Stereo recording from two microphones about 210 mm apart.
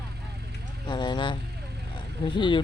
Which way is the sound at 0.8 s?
20° left (ahead or behind).